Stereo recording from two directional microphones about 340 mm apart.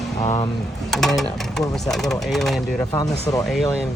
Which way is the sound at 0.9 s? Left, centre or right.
Centre.